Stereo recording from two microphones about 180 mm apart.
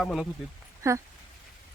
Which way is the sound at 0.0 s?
Centre (ahead or behind).